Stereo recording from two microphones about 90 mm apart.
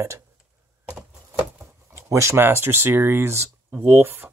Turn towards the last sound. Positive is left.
turn(degrees=-25)  # may be behind; listen again after turning